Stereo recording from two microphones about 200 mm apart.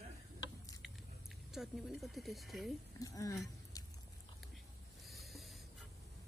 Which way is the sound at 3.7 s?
15° left (ahead or behind).